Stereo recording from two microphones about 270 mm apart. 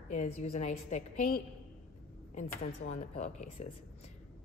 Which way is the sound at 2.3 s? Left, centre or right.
Left.